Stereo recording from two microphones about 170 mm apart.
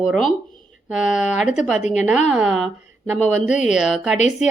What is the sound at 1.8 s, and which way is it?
Speech, 45° left (ahead or behind).